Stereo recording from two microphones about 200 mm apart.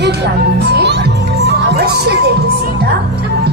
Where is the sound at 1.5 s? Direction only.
50° right (ahead or behind).